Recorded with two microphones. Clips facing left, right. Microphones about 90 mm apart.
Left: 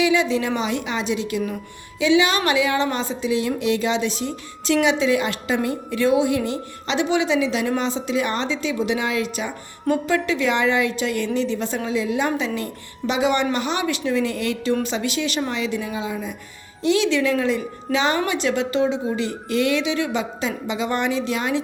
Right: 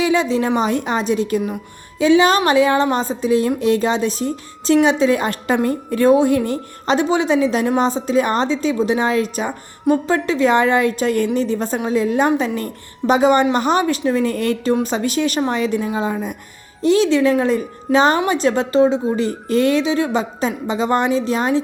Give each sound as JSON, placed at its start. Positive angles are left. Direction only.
{"t": 0.0, "sound": "a woman's voice", "side_deg": -40}